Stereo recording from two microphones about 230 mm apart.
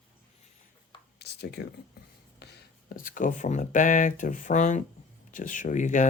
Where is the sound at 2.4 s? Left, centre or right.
Left.